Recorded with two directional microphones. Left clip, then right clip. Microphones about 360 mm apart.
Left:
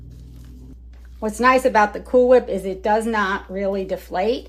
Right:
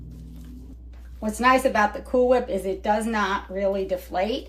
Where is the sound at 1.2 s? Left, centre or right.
Centre.